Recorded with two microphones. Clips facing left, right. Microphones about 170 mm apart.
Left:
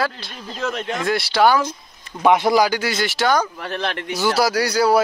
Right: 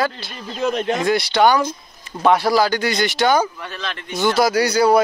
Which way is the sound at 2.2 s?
20° left (ahead or behind).